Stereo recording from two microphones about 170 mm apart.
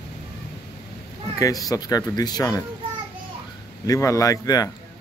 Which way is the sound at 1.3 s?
20° left (ahead or behind).